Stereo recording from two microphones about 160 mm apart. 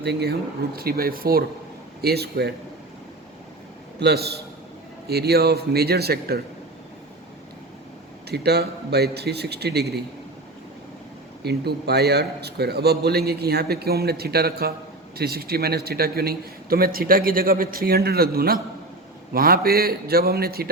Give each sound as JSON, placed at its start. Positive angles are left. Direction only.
{"t": 0.0, "sound": "a man's voice", "side_deg": -90}
{"t": 0.8, "sound": "a man's voice", "side_deg": -70}
{"t": 2.0, "sound": "a man's voice", "side_deg": -85}
{"t": 4.0, "sound": "a man's voice", "side_deg": -90}
{"t": 8.3, "sound": "a man's voice", "side_deg": -90}
{"t": 11.4, "sound": "a man's voice", "side_deg": -90}